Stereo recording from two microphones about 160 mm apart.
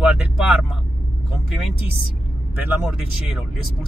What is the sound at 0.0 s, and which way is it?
Vehicle, 5° right (ahead or behind).